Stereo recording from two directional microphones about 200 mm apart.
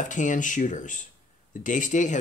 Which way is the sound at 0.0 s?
40° left (ahead or behind).